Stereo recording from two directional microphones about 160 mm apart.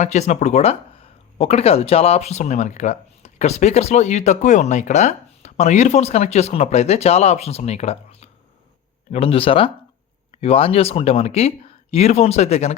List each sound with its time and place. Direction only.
0.0 s speech: 45° left (ahead or behind)